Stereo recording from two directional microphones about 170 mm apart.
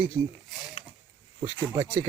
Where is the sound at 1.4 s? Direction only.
25° right (ahead or behind).